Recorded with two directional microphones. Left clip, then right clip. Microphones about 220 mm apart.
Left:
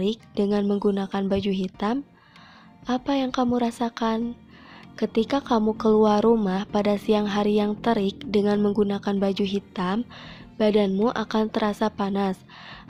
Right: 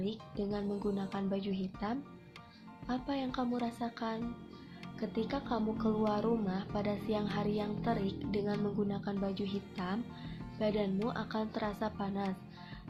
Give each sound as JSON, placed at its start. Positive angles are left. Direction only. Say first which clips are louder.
{"t": 0.0, "sound": "a woman's voice", "louder": "left 14 dB", "side_deg": 45}